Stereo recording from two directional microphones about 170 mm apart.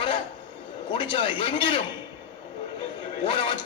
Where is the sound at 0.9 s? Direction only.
30° left (ahead or behind).